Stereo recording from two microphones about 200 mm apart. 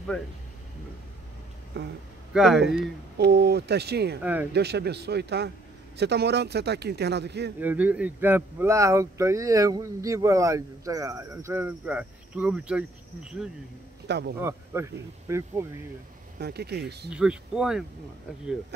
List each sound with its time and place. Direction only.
1.8 s speech: 60° right (ahead or behind)
2.3 s speech: centre (ahead or behind)
3.2 s speech: 55° right (ahead or behind)
4.2 s speech: 10° right (ahead or behind)
4.5 s speech: 55° right (ahead or behind)
7.6 s speech: 5° right (ahead or behind)
14.0 s speech: 55° right (ahead or behind)
14.4 s speech: 15° right (ahead or behind)
16.3 s speech: 55° right (ahead or behind)
17.1 s speech: 5° right (ahead or behind)